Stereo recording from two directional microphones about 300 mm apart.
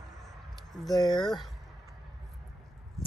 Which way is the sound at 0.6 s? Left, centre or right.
Centre.